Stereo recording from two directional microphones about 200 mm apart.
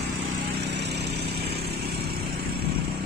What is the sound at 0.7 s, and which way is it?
Lawn mower, 55° right (ahead or behind).